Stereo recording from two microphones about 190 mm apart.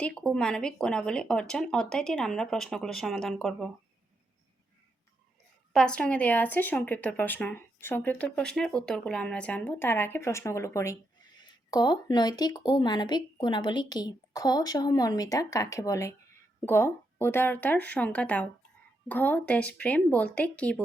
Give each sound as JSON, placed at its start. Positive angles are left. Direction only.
{"t": 0.0, "sound": "speech", "side_deg": 5}
{"t": 5.7, "sound": "a woman's voice", "side_deg": 5}